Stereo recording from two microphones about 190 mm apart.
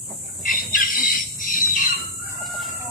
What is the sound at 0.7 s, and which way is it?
Squawk, 45° left (ahead or behind).